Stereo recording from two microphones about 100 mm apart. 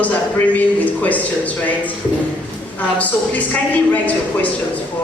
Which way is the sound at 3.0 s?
15° left (ahead or behind).